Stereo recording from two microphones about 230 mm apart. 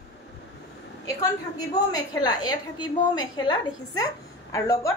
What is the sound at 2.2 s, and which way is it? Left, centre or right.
A woman's voice, centre.